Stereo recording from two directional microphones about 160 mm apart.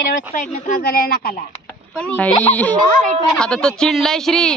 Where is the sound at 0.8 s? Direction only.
75° left (ahead or behind).